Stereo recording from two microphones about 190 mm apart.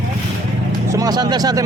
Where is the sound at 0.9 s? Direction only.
20° right (ahead or behind).